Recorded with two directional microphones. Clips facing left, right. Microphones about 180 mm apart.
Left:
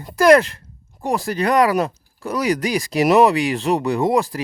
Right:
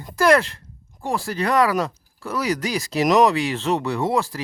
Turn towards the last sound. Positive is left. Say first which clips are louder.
# left 4 dB
turn(degrees=15)  # may be behind; listen again after turning